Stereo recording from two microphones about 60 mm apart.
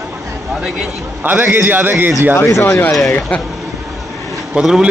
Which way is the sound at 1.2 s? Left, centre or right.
Right.